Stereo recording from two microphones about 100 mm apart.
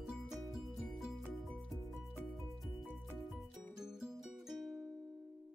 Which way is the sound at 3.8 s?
5° right (ahead or behind).